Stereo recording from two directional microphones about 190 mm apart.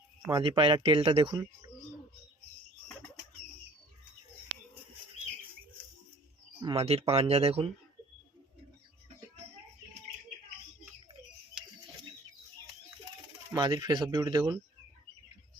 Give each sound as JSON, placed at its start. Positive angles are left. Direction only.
{"t": 0.3, "sound": "speech", "side_deg": -25}
{"t": 6.6, "sound": "speech", "side_deg": -30}
{"t": 13.5, "sound": "speech", "side_deg": -20}